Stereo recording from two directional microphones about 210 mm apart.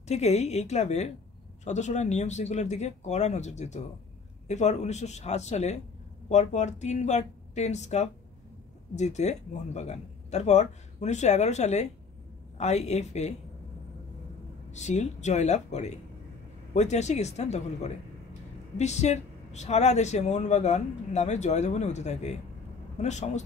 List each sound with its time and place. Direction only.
0.1 s speech: 30° left (ahead or behind)
14.7 s speech: 35° left (ahead or behind)